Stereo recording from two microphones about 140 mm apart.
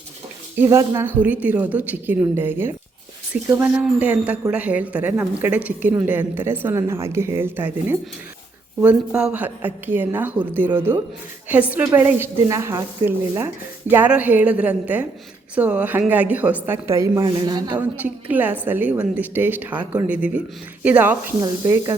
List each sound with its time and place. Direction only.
0.6 s speech: 20° right (ahead or behind)
17.7 s speech: 10° right (ahead or behind)